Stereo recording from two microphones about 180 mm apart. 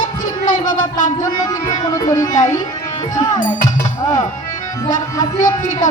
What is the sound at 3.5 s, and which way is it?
Music, 45° left (ahead or behind).